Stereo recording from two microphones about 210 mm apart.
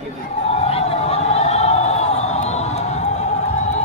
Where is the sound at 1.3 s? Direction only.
30° left (ahead or behind).